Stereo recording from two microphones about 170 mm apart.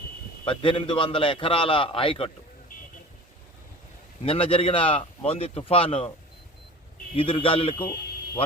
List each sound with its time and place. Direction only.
0.4 s a man's voice: 30° left (ahead or behind)
4.3 s a man's voice: 35° left (ahead or behind)
7.2 s a man's voice: 30° left (ahead or behind)